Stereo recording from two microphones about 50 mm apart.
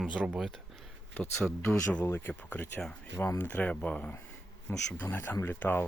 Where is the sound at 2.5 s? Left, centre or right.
Left.